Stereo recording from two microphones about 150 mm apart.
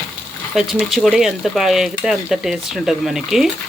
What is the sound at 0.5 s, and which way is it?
Speech, centre (ahead or behind).